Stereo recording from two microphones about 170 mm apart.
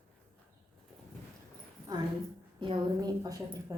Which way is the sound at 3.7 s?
20° right (ahead or behind).